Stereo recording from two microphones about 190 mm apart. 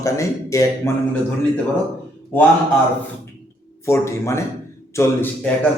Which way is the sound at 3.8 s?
15° left (ahead or behind).